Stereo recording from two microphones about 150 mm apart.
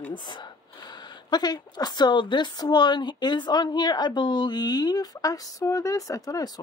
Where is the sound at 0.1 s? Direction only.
30° left (ahead or behind).